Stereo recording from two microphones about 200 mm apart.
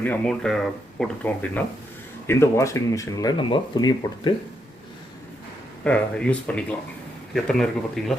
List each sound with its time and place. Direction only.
0.0 s speech: 5° left (ahead or behind)
5.8 s speech: 5° left (ahead or behind)